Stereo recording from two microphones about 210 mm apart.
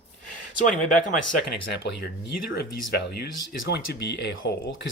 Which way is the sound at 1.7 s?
55° left (ahead or behind).